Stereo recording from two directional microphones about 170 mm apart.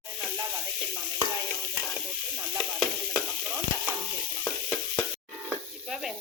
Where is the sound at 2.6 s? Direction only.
Centre (ahead or behind).